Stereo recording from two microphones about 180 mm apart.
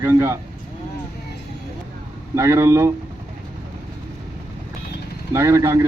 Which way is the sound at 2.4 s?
15° right (ahead or behind).